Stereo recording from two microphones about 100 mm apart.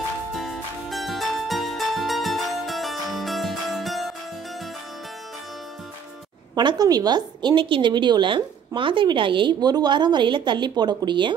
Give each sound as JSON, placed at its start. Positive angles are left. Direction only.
{"t": 0.4, "sound": "music", "side_deg": 0}
{"t": 6.5, "sound": "a woman's voice", "side_deg": -45}